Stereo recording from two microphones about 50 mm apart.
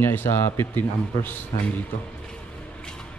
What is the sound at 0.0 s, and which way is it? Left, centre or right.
A man's voice, left.